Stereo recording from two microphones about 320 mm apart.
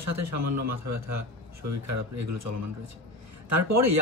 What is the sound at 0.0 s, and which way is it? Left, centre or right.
Speech, right.